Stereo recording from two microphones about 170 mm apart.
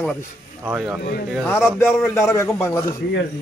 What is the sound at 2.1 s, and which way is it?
Speech, 15° left (ahead or behind).